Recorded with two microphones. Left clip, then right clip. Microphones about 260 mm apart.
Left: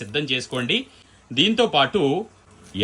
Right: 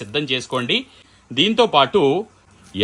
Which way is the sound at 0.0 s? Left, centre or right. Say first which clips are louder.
Right 2 dB; right.